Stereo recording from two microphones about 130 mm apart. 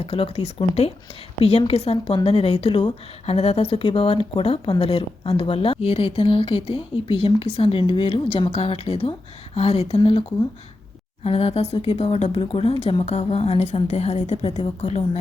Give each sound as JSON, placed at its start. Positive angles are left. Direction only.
{"t": 0.0, "sound": "a woman's voice", "side_deg": 45}